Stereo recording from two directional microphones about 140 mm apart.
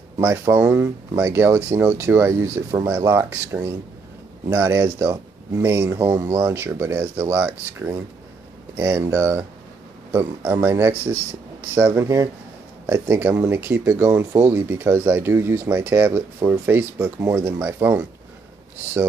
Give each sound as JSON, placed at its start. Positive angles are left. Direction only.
{"t": 0.2, "sound": "speech", "side_deg": -15}